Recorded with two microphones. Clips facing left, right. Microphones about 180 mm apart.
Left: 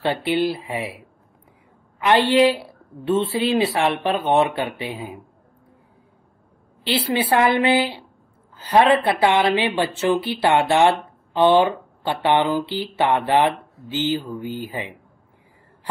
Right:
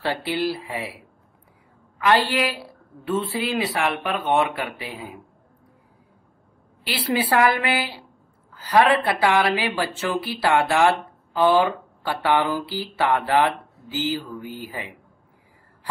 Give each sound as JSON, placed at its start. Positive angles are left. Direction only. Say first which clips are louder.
{"t": 0.0, "sound": "speech", "louder": "left 4 dB", "side_deg": 20}
{"t": 2.0, "sound": "speech", "louder": "left 4 dB", "side_deg": 20}
{"t": 6.8, "sound": "speech", "louder": "left 2 dB", "side_deg": 25}